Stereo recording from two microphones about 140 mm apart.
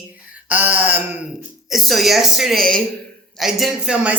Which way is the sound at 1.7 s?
Centre (ahead or behind).